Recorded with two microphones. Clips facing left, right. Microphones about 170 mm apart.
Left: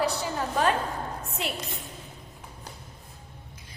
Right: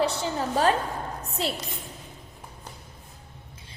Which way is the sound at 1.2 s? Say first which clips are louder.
Right 3 dB; 35° right (ahead or behind).